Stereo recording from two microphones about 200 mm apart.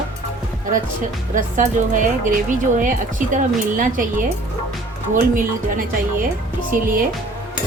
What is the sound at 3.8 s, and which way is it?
Speech, 40° right (ahead or behind).